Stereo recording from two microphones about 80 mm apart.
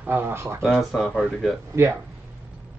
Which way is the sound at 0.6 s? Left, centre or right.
Centre.